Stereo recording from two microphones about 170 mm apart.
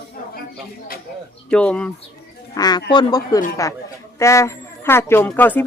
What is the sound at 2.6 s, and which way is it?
A man's voice, 25° left (ahead or behind).